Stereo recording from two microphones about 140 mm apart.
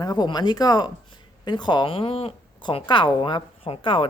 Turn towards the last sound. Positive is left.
turn(degrees=40)  # may be behind; listen again after turning